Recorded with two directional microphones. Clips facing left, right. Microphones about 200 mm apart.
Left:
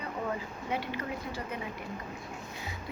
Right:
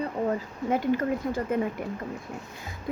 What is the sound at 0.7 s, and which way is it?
Speech, 45° right (ahead or behind).